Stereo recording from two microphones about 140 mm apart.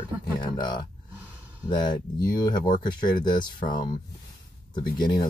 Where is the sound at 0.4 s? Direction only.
30° left (ahead or behind).